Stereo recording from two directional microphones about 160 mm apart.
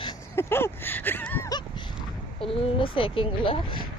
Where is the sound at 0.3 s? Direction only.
15° left (ahead or behind).